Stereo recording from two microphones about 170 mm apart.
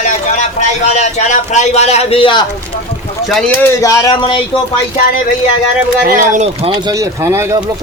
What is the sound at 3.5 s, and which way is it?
Speech, 15° left (ahead or behind).